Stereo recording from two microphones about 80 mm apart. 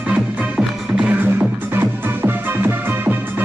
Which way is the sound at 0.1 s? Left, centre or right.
Centre.